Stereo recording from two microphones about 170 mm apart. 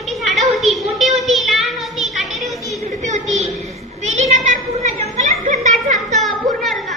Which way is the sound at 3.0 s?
45° right (ahead or behind).